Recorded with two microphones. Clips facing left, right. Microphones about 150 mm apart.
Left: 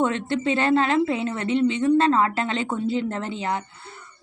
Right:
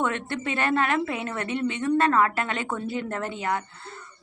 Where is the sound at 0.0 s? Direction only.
25° left (ahead or behind).